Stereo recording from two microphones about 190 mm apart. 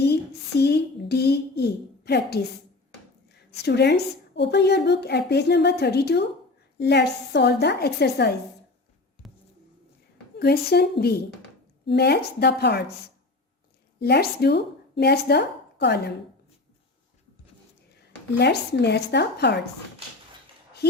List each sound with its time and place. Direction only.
0.6 s a sound: 60° left (ahead or behind)
3.5 s a woman's voice: 60° left (ahead or behind)
10.3 s a woman's voice: 55° left (ahead or behind)
14.0 s speech: 55° left (ahead or behind)
18.3 s a woman's voice: 60° left (ahead or behind)